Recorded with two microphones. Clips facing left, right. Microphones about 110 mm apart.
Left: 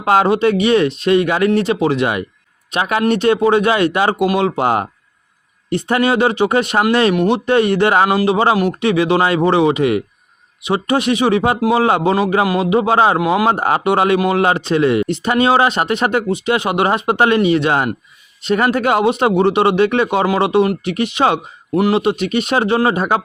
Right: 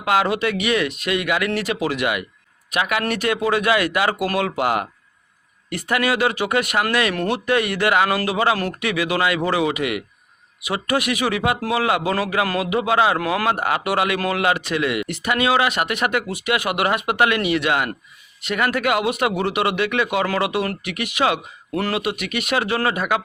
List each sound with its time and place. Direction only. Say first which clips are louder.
0.0 s a man's voice: left 6 dB; 30° left (ahead or behind)
13.1 s a man's voice: left 6 dB; 20° left (ahead or behind)